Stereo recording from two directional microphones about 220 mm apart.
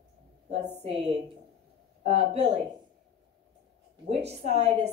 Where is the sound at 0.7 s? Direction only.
30° right (ahead or behind).